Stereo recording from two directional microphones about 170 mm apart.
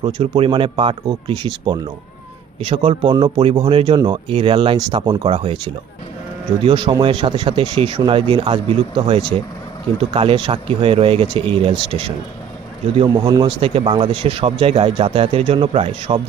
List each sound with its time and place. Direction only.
0.0 s speech: 30° right (ahead or behind)